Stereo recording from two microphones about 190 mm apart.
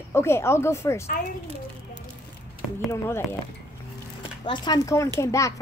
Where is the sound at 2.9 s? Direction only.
10° left (ahead or behind).